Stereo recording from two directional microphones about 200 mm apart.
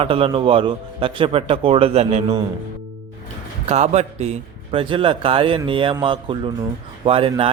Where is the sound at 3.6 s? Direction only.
35° right (ahead or behind).